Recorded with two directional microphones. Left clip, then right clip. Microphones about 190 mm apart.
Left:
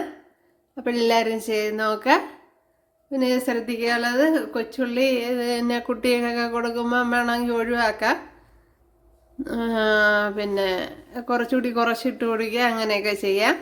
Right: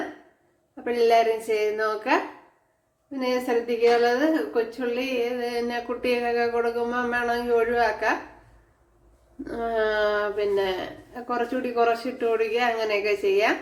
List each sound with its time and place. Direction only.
0.9 s a woman's voice: 55° left (ahead or behind)
9.4 s a woman's voice: 60° left (ahead or behind)